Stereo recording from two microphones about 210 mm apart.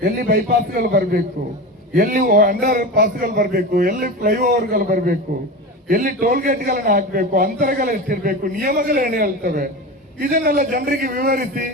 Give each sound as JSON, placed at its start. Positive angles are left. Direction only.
{"t": 0.0, "sound": "a man's voice", "side_deg": -45}